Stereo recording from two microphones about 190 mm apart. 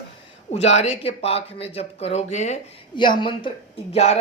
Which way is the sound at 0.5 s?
35° left (ahead or behind).